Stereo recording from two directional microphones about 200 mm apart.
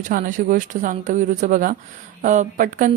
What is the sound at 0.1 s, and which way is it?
Speech, 40° right (ahead or behind).